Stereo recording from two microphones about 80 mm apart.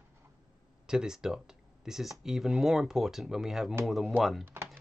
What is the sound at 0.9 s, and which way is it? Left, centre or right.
Speech, centre.